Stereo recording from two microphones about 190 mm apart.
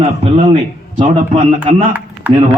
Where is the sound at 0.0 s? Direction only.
30° right (ahead or behind).